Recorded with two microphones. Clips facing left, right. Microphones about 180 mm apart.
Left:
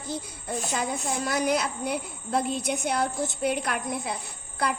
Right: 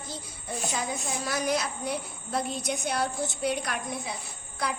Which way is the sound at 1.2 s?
60° left (ahead or behind).